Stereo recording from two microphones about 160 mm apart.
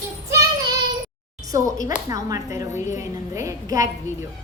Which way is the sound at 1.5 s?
20° right (ahead or behind).